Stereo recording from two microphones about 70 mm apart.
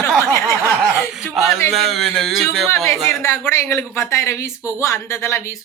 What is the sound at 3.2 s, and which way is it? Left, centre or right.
A woman's voice, left.